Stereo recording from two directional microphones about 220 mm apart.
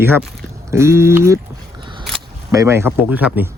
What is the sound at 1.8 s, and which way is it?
Single-lens reflex camera, 20° right (ahead or behind).